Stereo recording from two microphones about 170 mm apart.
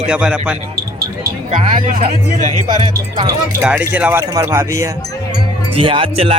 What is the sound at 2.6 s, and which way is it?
Speech, 25° right (ahead or behind).